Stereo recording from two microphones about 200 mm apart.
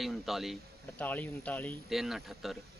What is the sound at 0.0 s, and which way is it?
A man's voice, centre (ahead or behind).